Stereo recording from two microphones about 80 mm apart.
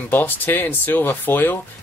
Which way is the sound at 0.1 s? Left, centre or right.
Left.